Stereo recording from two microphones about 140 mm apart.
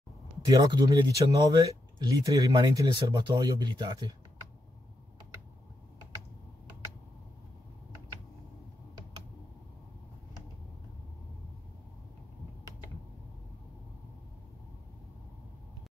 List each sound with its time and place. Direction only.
0.5 s speech: 30° right (ahead or behind)